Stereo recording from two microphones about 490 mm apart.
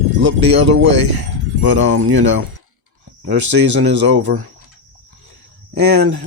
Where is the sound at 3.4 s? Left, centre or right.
Right.